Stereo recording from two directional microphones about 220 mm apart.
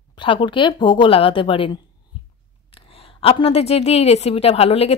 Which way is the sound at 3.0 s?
25° left (ahead or behind).